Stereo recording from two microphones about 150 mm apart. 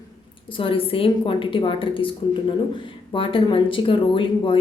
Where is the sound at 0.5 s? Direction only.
35° left (ahead or behind).